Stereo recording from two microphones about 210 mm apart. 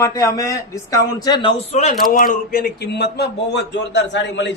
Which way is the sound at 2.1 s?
40° left (ahead or behind).